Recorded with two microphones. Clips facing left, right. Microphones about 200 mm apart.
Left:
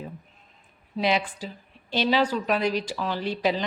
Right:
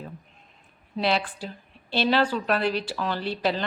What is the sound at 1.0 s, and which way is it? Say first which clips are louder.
A woman's voice: left 1 dB; 10° left (ahead or behind).